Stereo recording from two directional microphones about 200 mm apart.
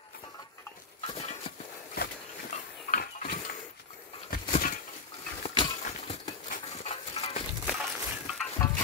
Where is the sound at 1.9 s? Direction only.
45° left (ahead or behind).